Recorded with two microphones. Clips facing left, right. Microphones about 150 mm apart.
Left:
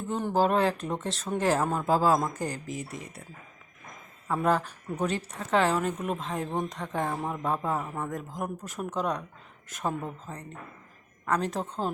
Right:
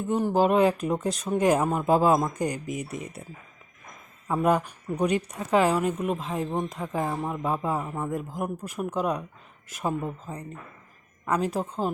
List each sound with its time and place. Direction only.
0.1 s speech: 10° right (ahead or behind)
4.3 s speech: 15° right (ahead or behind)